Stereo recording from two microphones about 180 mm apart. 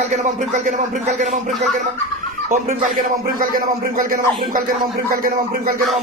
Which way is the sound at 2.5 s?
50° right (ahead or behind).